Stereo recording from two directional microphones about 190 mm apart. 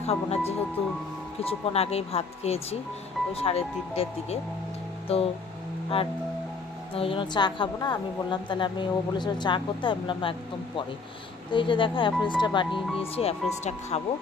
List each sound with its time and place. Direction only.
0.0 s speech: 35° left (ahead or behind)
7.0 s a woman's voice: 25° left (ahead or behind)
11.5 s a woman's voice: 25° left (ahead or behind)